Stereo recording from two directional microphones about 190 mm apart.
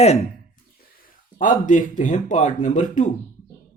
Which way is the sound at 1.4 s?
45° left (ahead or behind).